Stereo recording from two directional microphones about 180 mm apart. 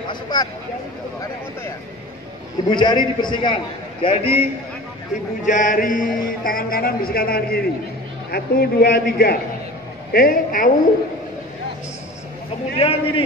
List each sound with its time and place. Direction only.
0.1 s speech: 25° left (ahead or behind)
2.7 s a man's voice: 25° left (ahead or behind)
5.4 s a man's voice: 45° left (ahead or behind)
12.7 s a man's voice: 30° left (ahead or behind)